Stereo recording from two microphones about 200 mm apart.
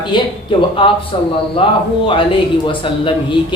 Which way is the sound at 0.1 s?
25° left (ahead or behind).